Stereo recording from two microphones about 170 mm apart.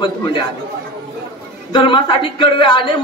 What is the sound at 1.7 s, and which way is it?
A man's voice, 25° left (ahead or behind).